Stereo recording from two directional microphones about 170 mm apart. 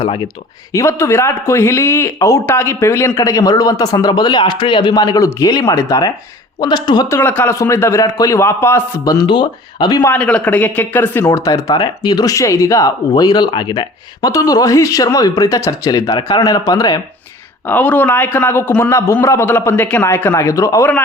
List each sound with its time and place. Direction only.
0.0 s speech: 30° left (ahead or behind)
0.7 s a man's voice: 15° left (ahead or behind)
9.2 s speech: 25° left (ahead or behind)
10.0 s a man's voice: 10° left (ahead or behind)
17.7 s a man's voice: 10° left (ahead or behind)